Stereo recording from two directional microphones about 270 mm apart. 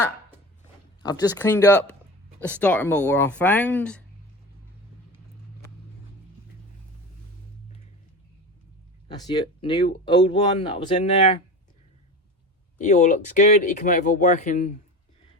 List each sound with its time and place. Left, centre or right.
1.0 s speech: centre
9.0 s speech: centre
12.8 s speech: left